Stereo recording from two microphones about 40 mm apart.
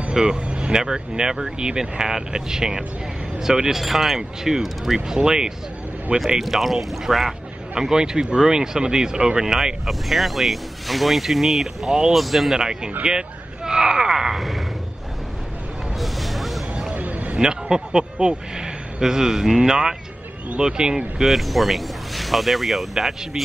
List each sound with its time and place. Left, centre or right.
0.1 s speech: centre
3.7 s speech: centre
4.2 s speech: centre
7.8 s speech: centre
9.8 s speech: centre
12.5 s speech: centre
14.3 s speech: centre
16.0 s vehicle: centre
16.9 s a sound: right
17.4 s speech: centre
21.2 s speech: centre